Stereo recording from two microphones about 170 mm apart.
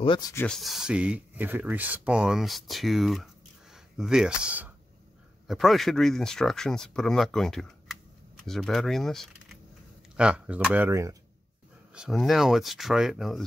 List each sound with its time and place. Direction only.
0.0 s speech: 30° left (ahead or behind)
0.5 s speech: centre (ahead or behind); by 11.1 s 15° right (ahead or behind)
11.9 s speech: centre (ahead or behind)